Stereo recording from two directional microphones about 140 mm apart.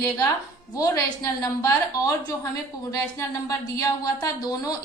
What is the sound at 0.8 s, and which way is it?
Speech, 25° left (ahead or behind).